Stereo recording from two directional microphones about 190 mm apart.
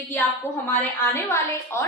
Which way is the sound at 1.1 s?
15° left (ahead or behind).